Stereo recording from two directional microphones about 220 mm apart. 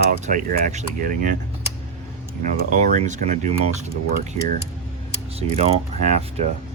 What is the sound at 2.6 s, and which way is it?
Speech, 30° right (ahead or behind).